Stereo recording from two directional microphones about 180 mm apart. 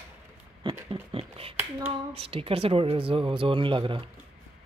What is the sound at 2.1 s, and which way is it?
Speech, 30° right (ahead or behind).